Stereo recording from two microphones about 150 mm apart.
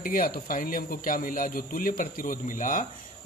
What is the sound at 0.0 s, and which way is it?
A man's voice, 70° left (ahead or behind).